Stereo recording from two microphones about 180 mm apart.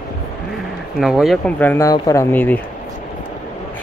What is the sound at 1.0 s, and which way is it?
Speech, centre (ahead or behind).